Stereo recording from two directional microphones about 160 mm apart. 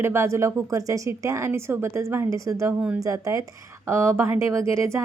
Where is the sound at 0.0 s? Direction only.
15° right (ahead or behind).